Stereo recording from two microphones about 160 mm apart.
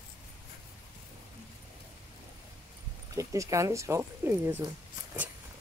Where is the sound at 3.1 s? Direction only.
20° right (ahead or behind).